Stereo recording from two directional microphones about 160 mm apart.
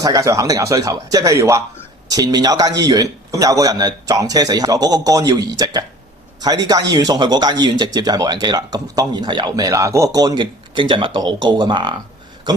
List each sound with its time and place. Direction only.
0.0 s speech: 20° right (ahead or behind)
6.9 s speech: 25° right (ahead or behind)